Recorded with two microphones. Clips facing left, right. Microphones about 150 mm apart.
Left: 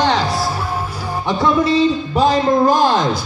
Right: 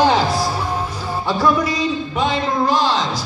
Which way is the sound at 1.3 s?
25° left (ahead or behind).